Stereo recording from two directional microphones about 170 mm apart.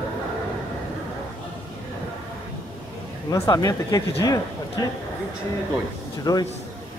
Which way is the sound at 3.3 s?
20° left (ahead or behind).